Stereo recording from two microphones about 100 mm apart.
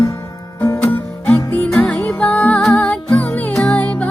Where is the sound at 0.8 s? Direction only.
20° left (ahead or behind).